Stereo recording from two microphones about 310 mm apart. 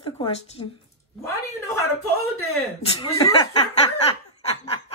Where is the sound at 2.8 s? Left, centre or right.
Centre.